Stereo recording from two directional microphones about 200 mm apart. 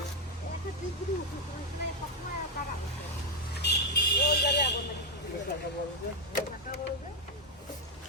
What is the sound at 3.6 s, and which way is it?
Vehicle, 60° left (ahead or behind).